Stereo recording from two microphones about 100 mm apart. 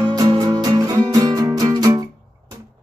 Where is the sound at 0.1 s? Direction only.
45° right (ahead or behind).